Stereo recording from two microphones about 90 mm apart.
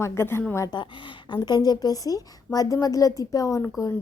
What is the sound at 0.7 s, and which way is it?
A woman's voice, 60° left (ahead or behind).